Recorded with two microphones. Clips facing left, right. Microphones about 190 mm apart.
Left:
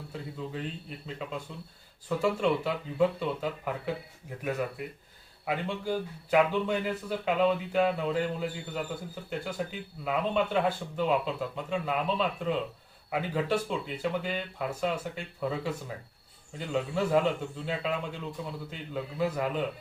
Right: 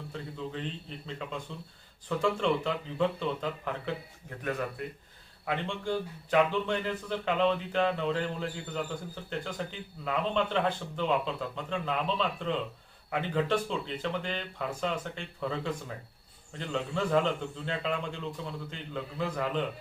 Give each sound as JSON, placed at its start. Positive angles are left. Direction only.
{"t": 0.1, "sound": "a man's voice", "side_deg": 5}